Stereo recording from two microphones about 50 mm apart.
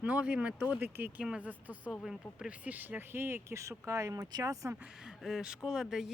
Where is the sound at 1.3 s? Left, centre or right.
Right.